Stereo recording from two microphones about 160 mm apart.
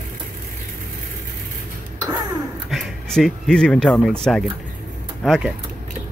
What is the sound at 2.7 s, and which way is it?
Speech, centre (ahead or behind).